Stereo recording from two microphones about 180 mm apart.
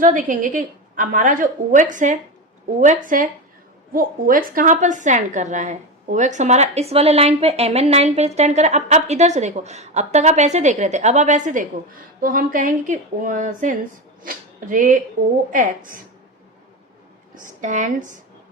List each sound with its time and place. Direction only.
0.0 s a woman's voice: 45° right (ahead or behind)
17.3 s a woman's voice: 45° right (ahead or behind)